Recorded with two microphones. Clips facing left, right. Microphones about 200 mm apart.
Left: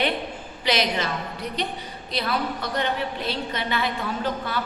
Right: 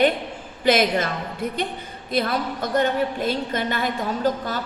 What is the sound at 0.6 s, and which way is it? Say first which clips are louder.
A woman's voice: right 5 dB; 50° right (ahead or behind).